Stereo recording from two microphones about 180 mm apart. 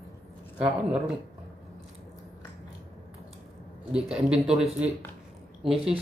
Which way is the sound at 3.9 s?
5° right (ahead or behind).